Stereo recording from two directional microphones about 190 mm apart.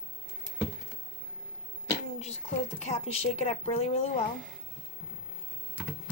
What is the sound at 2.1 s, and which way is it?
Speech, 35° left (ahead or behind).